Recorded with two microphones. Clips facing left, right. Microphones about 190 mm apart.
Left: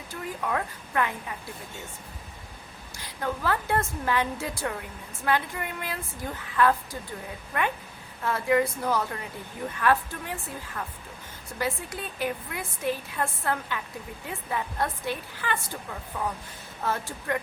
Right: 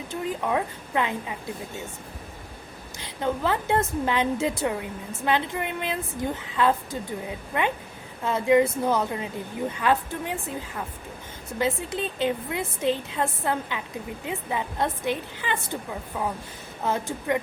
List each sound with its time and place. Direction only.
0.1 s a woman's voice: 20° right (ahead or behind)
3.0 s a woman's voice: 20° right (ahead or behind)
11.6 s a woman's voice: 25° right (ahead or behind)